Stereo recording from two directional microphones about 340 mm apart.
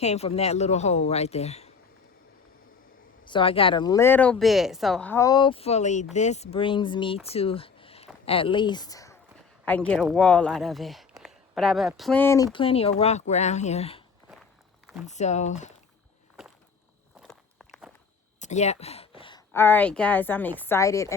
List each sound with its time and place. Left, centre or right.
0.0 s a woman's voice: centre
3.2 s speech: centre
15.0 s a woman's voice: centre
16.4 s walk: centre
18.3 s speech: left